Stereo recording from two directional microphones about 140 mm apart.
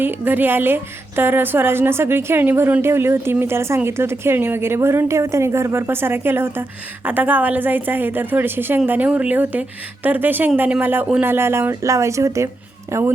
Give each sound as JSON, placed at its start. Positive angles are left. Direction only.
{"t": 0.0, "sound": "a woman's voice", "side_deg": -15}